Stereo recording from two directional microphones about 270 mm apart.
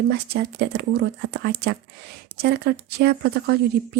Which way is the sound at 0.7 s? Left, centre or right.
Right.